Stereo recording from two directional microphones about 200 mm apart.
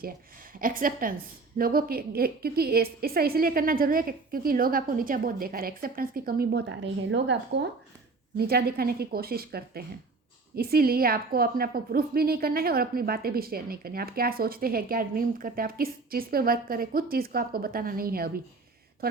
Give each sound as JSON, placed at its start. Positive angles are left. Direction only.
{"t": 0.6, "sound": "a woman's voice", "side_deg": -45}
{"t": 8.4, "sound": "a woman's voice", "side_deg": -50}